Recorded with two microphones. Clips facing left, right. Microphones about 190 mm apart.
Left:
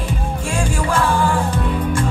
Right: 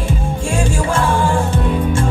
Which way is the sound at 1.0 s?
25° right (ahead or behind).